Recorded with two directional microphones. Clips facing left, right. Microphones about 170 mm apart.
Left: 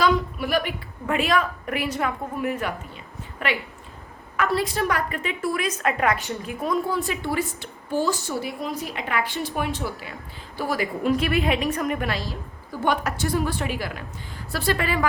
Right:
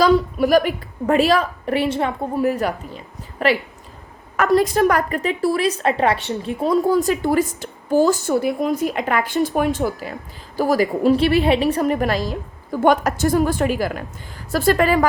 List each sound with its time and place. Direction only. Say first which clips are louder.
0.0 s a woman's voice: right 7 dB; 40° right (ahead or behind)